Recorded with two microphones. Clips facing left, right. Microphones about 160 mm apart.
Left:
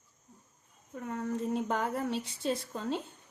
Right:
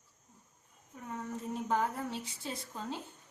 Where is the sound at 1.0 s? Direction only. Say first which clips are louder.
Left 6 dB; 65° left (ahead or behind).